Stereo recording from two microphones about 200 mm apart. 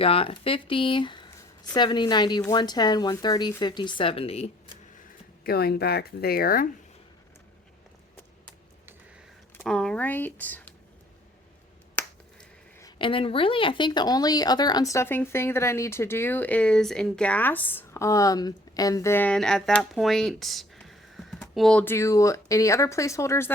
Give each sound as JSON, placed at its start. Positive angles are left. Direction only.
{"t": 0.0, "sound": "a woman's voice", "side_deg": 30}
{"t": 5.4, "sound": "speech", "side_deg": 50}
{"t": 9.6, "sound": "speech", "side_deg": 5}
{"t": 11.9, "sound": "finger snapping", "side_deg": 10}
{"t": 13.0, "sound": "speech", "side_deg": 25}